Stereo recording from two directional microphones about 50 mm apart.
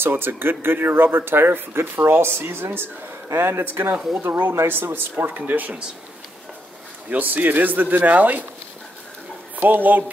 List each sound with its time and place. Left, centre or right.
0.0 s speech: right
3.7 s speech: right
7.1 s speech: right
9.6 s speech: right